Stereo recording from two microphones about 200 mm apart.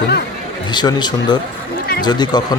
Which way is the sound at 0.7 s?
20° left (ahead or behind).